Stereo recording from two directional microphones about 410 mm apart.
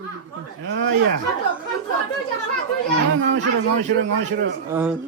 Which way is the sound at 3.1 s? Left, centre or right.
Right.